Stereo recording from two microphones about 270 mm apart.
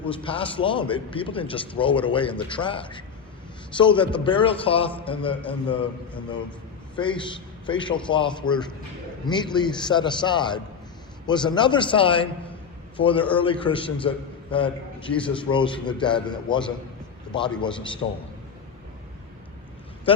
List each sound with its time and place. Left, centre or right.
0.1 s a man's voice: centre
20.1 s a man's voice: centre